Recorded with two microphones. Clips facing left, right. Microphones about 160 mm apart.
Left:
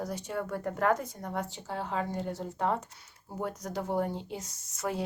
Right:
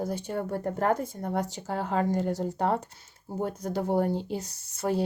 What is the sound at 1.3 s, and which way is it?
Speech, 40° right (ahead or behind).